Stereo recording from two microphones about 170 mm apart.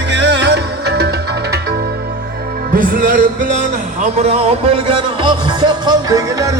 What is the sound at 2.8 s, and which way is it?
Music, 55° right (ahead or behind).